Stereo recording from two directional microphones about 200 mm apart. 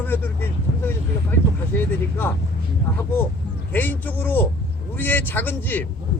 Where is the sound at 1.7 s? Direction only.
10° left (ahead or behind).